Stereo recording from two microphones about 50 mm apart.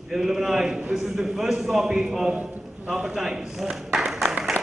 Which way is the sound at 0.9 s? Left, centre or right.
Centre.